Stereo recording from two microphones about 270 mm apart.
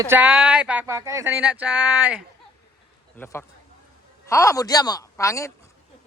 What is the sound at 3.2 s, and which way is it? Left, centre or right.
A woman's voice, centre.